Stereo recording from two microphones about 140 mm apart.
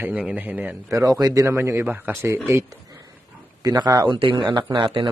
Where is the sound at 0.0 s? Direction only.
10° right (ahead or behind).